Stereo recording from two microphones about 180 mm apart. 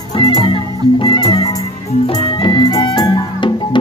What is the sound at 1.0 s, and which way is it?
Music, 25° left (ahead or behind).